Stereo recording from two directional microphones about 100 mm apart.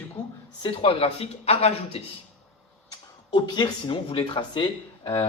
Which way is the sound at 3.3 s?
50° left (ahead or behind).